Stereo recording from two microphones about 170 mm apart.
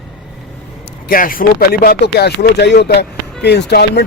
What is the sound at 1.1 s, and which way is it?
Speech, 55° left (ahead or behind).